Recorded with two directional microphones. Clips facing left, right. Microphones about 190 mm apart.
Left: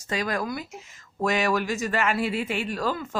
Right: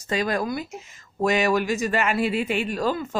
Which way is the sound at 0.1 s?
25° right (ahead or behind).